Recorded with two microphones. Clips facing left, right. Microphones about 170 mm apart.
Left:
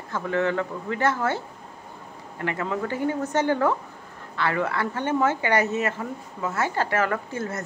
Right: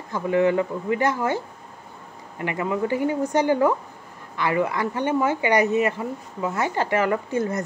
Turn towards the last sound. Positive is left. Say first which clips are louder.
# right 5 dB
turn(degrees=-15)  # may be behind; listen again after turning